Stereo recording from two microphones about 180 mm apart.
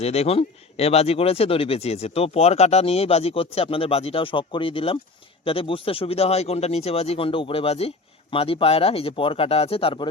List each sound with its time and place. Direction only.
0.0 s speech: 35° left (ahead or behind)